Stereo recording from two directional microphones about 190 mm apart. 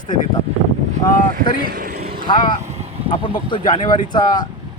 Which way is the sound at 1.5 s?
55° right (ahead or behind).